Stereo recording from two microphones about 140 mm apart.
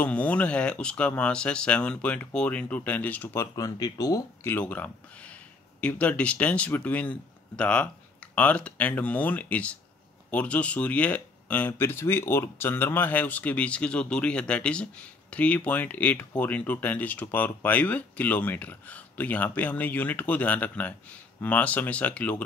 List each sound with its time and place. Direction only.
0.0 s speech: 10° left (ahead or behind)
3.5 s speech: 25° left (ahead or behind)
4.5 s speech: 15° left (ahead or behind)